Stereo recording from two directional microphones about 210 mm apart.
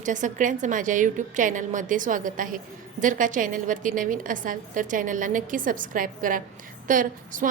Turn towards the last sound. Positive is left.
turn(degrees=-40)  # may be behind; listen again after turning